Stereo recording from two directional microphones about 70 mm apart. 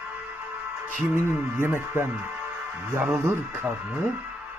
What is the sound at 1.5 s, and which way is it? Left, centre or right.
A man's voice, right.